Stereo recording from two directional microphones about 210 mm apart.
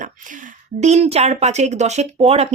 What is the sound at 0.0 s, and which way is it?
A woman's voice, 40° right (ahead or behind).